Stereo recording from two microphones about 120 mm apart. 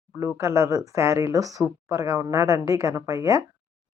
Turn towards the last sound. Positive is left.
turn(degrees=-25)  # may be behind; listen again after turning